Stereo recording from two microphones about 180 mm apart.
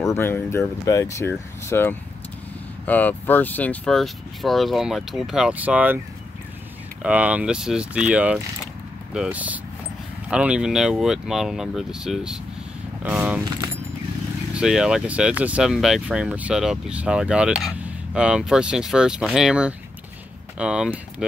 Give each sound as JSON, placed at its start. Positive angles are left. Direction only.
{"t": 0.0, "sound": "speech", "side_deg": 15}
{"t": 7.0, "sound": "speech", "side_deg": -5}
{"t": 14.5, "sound": "speech", "side_deg": -5}